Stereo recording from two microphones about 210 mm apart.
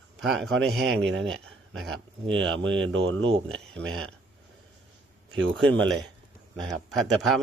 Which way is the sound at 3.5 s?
5° left (ahead or behind).